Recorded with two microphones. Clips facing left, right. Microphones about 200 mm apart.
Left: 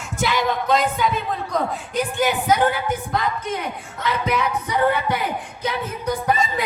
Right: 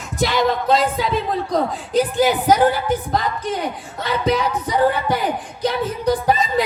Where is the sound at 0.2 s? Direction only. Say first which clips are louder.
Right 3 dB; 35° right (ahead or behind).